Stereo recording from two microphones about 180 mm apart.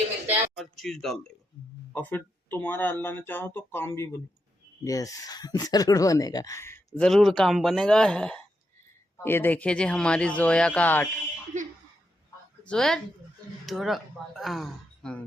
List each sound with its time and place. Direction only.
0.3 s speech: centre (ahead or behind)
11.5 s speech: 40° right (ahead or behind)
12.6 s speech: 5° left (ahead or behind)